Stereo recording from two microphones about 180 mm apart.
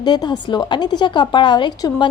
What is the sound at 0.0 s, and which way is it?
A woman's voice, 25° left (ahead or behind).